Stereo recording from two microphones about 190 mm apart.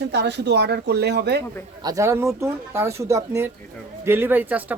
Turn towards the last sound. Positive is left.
turn(degrees=-10)  # may be behind; listen again after turning